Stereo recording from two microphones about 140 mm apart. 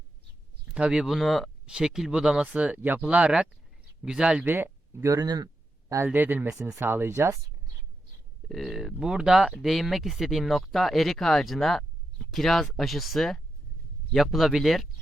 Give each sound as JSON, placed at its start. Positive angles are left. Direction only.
{"t": 0.7, "sound": "speech", "side_deg": -5}
{"t": 6.1, "sound": "speech", "side_deg": -15}
{"t": 8.4, "sound": "speech", "side_deg": 0}